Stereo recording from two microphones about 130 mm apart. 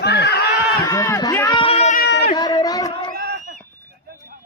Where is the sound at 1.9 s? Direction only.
90° left.